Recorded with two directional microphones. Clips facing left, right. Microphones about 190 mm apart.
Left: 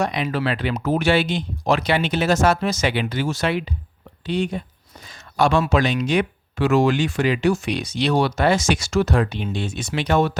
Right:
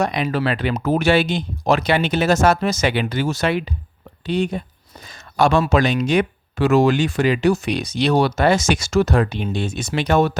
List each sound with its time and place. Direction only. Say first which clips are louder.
0.0 s speech: right 2 dB; 45° right (ahead or behind)